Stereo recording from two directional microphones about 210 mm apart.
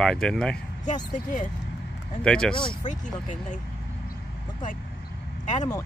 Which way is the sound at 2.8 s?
35° left (ahead or behind).